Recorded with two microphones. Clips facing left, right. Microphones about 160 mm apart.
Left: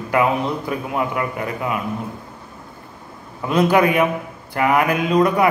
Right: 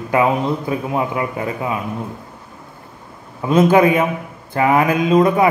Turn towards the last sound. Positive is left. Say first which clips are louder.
# right 3 dB
turn(degrees=-20)  # may be behind; listen again after turning